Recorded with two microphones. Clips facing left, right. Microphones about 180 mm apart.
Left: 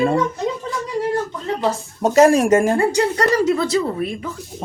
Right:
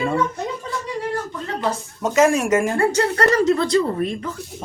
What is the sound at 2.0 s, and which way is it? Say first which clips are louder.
Speech: left 4 dB; 35° left (ahead or behind).